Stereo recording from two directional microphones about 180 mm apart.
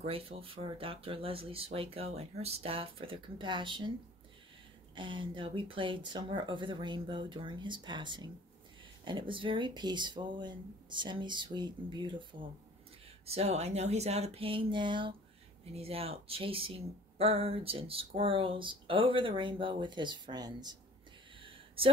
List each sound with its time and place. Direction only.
0.0 s speech: 30° right (ahead or behind)
4.9 s speech: 25° right (ahead or behind)
21.4 s a sound: 30° right (ahead or behind)